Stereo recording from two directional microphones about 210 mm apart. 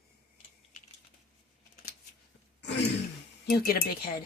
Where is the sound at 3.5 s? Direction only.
45° left (ahead or behind).